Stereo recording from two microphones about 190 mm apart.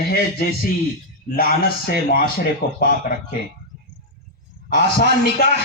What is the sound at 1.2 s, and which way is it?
A man's voice, 50° left (ahead or behind).